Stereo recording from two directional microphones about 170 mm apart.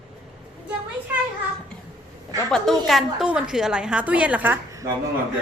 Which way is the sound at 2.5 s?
Centre (ahead or behind).